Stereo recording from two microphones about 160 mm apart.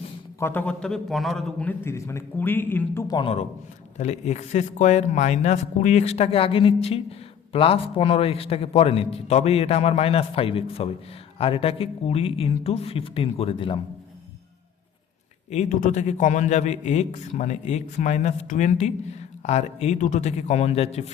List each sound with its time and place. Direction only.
0.3 s a man's voice: 15° left (ahead or behind)
3.9 s a man's voice: 45° left (ahead or behind)
15.4 s a man's voice: 50° left (ahead or behind)